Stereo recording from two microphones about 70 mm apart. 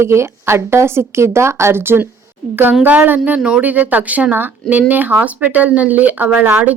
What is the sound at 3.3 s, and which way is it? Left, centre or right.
Speech, centre.